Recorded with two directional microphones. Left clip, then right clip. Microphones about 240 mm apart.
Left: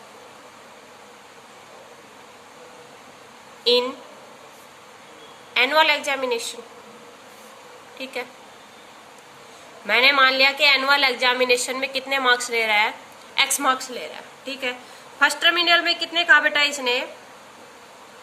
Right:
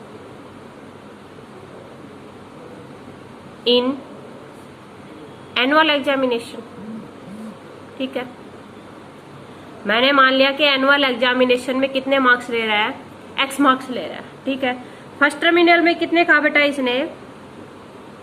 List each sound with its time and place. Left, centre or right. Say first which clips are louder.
3.6 s a woman's voice: right 3 dB; left
5.5 s a woman's voice: right 2 dB; left
7.9 s a woman's voice: right 5 dB; left
9.8 s a woman's voice: right 2 dB; left